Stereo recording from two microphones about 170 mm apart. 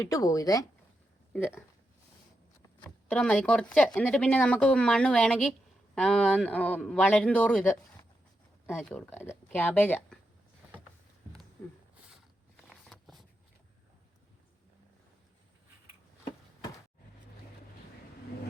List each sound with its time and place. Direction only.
0.0 s speech: 20° left (ahead or behind)
2.8 s speech: 5° left (ahead or behind)
12.5 s a sound: centre (ahead or behind)